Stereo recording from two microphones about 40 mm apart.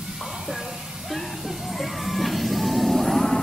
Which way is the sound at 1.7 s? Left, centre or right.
Centre.